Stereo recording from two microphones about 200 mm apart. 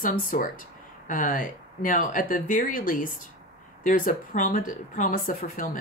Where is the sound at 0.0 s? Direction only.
40° left (ahead or behind).